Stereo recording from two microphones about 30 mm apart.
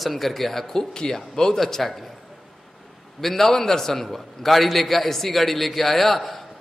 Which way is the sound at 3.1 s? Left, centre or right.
Centre.